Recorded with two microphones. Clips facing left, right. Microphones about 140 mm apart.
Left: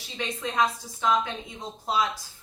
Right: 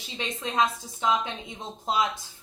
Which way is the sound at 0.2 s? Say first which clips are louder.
Even; 20° right (ahead or behind).